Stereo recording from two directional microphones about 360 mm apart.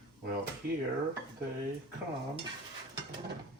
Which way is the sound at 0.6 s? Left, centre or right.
Right.